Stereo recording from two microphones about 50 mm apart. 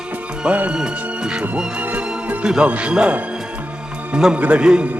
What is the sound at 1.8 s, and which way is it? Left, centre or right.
Music, right.